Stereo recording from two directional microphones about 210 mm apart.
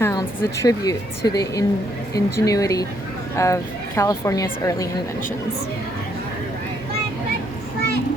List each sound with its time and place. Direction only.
0.0 s a woman's voice: 15° left (ahead or behind)